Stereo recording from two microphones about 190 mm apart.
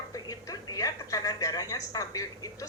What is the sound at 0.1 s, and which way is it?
Music, 20° left (ahead or behind).